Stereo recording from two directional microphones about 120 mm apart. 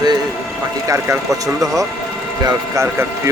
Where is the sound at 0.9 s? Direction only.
25° right (ahead or behind).